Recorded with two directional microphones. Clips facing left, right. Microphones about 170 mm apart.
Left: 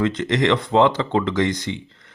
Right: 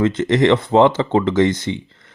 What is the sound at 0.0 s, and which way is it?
Speech, 25° right (ahead or behind).